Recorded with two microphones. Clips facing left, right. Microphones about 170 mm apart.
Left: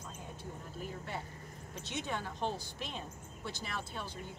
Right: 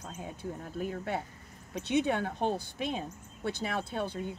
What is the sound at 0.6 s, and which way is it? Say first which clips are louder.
Speech: right 9 dB; 65° right (ahead or behind).